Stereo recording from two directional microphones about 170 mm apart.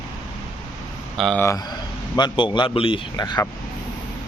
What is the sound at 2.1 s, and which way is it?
A man's voice, 25° left (ahead or behind).